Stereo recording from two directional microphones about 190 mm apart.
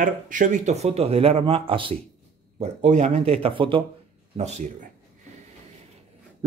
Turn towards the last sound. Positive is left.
turn(degrees=-35)  # may be behind; listen again after turning